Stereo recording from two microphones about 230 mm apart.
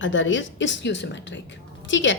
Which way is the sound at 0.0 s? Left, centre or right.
Left.